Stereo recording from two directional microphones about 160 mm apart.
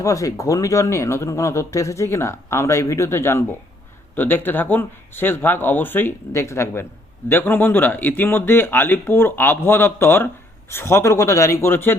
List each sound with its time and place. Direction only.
0.0 s speech: 20° left (ahead or behind)